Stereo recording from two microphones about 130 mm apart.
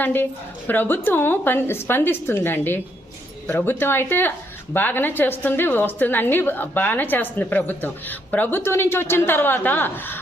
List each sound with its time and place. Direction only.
0.0 s a woman's voice: 15° left (ahead or behind)